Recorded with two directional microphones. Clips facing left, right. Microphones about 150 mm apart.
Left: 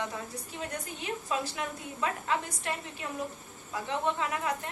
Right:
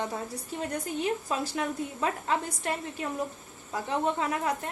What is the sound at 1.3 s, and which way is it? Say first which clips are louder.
Speech: right 1 dB; 40° right (ahead or behind).